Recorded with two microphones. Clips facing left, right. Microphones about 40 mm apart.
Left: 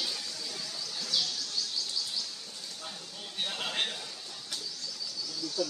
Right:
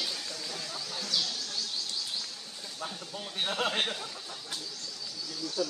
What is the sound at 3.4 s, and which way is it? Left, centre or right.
Speech, right.